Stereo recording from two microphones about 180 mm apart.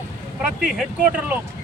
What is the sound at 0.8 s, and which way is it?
Speech, 10° right (ahead or behind).